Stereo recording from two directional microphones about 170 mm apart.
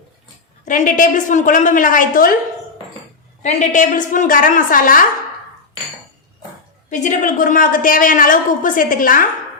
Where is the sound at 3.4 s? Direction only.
45° left (ahead or behind).